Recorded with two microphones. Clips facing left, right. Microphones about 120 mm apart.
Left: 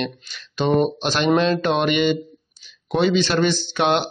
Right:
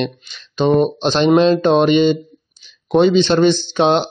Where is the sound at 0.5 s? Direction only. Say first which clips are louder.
Right 4 dB; 20° right (ahead or behind).